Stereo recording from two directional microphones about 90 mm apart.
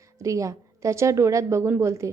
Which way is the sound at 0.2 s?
35° right (ahead or behind).